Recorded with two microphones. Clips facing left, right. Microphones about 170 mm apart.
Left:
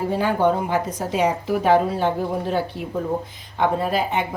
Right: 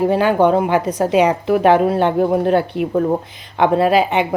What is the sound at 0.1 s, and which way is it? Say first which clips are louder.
A woman's voice: right 6 dB; 80° right.